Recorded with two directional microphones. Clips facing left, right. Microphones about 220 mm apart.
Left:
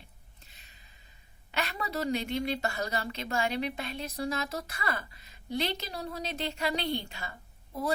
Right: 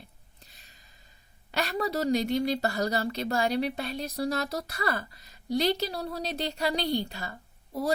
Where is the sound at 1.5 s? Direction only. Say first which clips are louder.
Right 5 dB; 40° right (ahead or behind).